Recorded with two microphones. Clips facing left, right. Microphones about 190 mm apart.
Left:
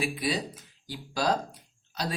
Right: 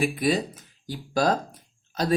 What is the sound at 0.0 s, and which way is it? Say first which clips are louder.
Speech: right 6 dB; 50° right (ahead or behind).